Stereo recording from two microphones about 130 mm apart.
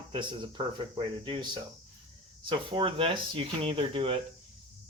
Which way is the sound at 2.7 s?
45° right (ahead or behind).